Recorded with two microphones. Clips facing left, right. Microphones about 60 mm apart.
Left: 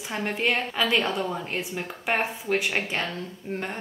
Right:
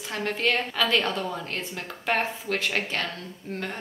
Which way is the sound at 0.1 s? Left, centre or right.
Centre.